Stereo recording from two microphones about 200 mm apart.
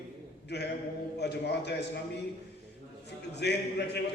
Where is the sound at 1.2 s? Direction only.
55° left (ahead or behind).